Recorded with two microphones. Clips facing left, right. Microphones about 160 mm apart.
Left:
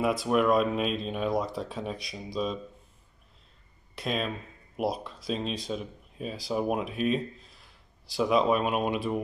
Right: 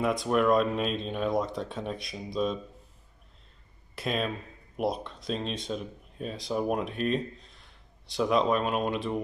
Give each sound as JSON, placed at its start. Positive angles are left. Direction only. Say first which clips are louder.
{"t": 0.0, "sound": "speech", "louder": "even", "side_deg": 5}
{"t": 3.9, "sound": "speech", "louder": "right 1 dB", "side_deg": 0}